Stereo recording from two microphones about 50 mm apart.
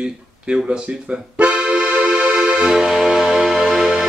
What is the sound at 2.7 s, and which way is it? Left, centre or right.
Music, centre.